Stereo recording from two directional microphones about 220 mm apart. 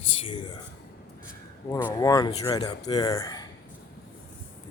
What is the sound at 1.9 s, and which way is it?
Speech, 15° left (ahead or behind).